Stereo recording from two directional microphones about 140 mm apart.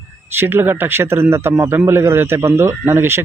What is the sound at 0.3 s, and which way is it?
A man's voice, 15° right (ahead or behind).